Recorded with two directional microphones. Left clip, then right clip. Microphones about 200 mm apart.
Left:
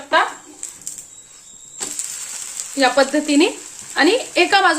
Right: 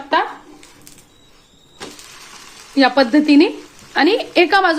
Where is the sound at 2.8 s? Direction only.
35° right (ahead or behind).